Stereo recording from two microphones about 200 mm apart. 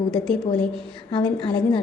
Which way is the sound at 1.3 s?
25° left (ahead or behind).